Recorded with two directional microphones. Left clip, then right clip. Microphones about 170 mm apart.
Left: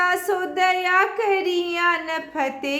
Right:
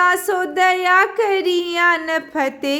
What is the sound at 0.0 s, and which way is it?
Speech, 30° right (ahead or behind).